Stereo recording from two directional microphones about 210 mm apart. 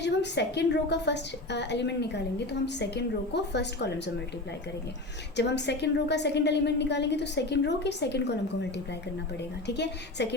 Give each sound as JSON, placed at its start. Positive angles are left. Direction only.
{"t": 0.0, "sound": "a woman's voice", "side_deg": 55}
{"t": 5.4, "sound": "a woman's voice", "side_deg": 55}
{"t": 9.6, "sound": "a woman's voice", "side_deg": 55}